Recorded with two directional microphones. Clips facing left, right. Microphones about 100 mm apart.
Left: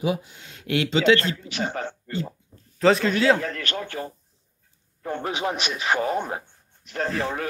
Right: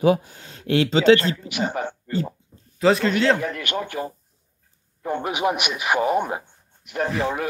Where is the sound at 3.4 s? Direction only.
15° right (ahead or behind).